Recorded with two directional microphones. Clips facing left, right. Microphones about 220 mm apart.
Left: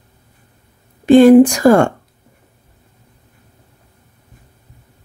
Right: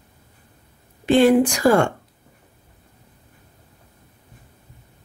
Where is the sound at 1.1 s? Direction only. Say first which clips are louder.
Left 9 dB; 45° left (ahead or behind).